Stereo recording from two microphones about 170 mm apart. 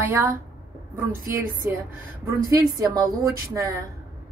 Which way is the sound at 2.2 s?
20° right (ahead or behind).